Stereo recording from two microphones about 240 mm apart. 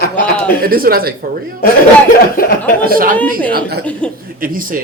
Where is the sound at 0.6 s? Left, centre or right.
Right.